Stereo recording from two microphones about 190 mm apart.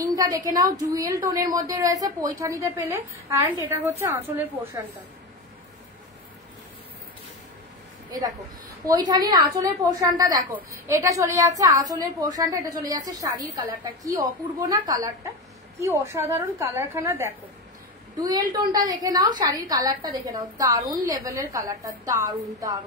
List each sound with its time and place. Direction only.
0.0 s a woman's voice: 20° right (ahead or behind)
8.8 s a woman's voice: 20° right (ahead or behind)